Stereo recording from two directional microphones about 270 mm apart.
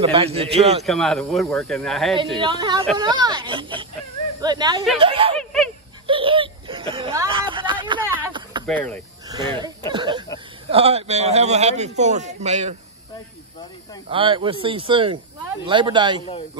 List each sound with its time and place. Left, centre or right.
0.0 s speech: right
0.8 s speech: centre
2.3 s speech: centre
6.0 s a sound: centre
8.6 s speech: centre
9.6 s a sound: centre
10.7 s speech: right
14.1 s speech: centre